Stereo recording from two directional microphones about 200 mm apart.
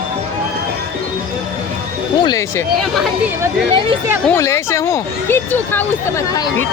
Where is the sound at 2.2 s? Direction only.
15° left (ahead or behind).